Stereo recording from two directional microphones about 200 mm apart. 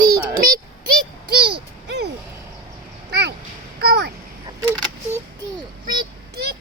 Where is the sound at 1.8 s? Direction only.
60° right (ahead or behind).